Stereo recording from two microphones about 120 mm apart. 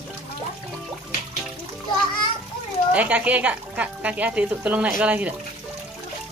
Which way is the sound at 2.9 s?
10° right (ahead or behind).